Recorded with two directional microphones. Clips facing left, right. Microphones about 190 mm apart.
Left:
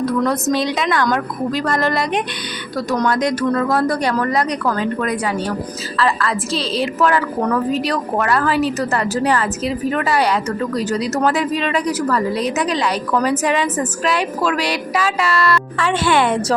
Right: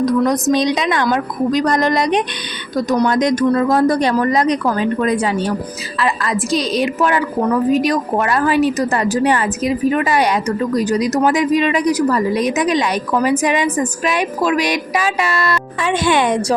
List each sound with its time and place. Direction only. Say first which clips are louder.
0.0 s a woman's voice: right 3 dB; 15° right (ahead or behind)